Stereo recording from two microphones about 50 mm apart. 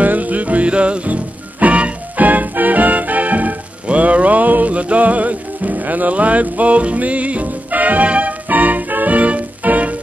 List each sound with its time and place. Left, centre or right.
0.0 s music: right